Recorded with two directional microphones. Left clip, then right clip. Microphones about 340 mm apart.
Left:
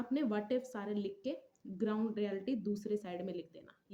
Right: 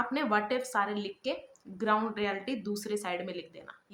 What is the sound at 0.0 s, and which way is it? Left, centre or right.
Speech, left.